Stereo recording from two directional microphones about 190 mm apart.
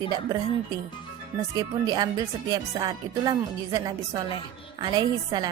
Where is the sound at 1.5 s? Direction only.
20° right (ahead or behind).